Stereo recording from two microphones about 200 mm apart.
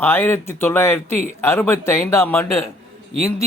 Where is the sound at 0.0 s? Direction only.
10° left (ahead or behind).